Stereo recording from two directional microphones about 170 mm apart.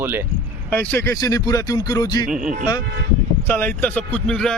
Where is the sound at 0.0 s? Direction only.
10° right (ahead or behind).